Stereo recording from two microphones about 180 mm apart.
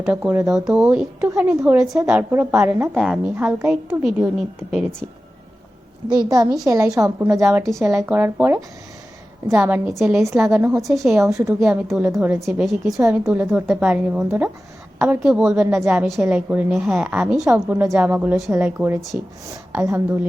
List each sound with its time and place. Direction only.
0.0 s a woman's voice: 10° right (ahead or behind)
6.1 s a woman's voice: 20° right (ahead or behind)
10.8 s a woman's voice: centre (ahead or behind)
11.2 s a woman's voice: 15° right (ahead or behind)
12.4 s a woman's voice: centre (ahead or behind)
13.0 s a woman's voice: 15° right (ahead or behind)